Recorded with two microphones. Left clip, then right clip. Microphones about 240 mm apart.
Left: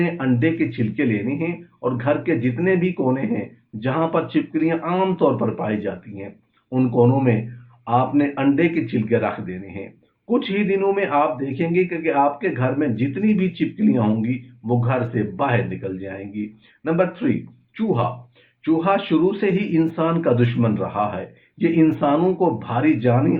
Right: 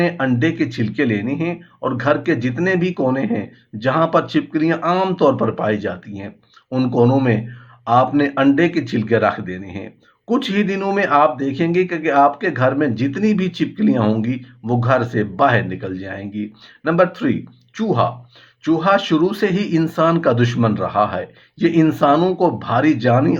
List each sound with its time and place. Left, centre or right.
0.0 s speech: right
18.6 s speech: right